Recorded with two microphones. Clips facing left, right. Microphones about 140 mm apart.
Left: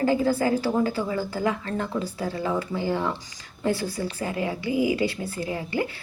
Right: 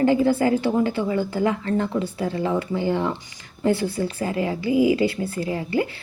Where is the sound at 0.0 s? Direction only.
25° right (ahead or behind).